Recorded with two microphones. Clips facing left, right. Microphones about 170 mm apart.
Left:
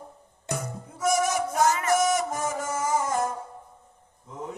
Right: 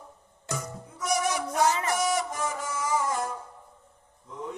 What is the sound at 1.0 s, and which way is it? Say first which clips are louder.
Music: left 4 dB; 45° left (ahead or behind).